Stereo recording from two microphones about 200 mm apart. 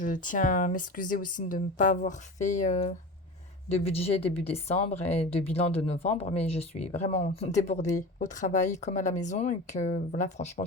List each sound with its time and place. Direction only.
0.0 s a woman's voice: 40° left (ahead or behind)